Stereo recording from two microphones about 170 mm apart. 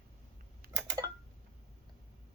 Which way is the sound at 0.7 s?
20° right (ahead or behind).